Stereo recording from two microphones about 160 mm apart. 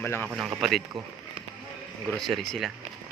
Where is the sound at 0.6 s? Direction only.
Centre (ahead or behind).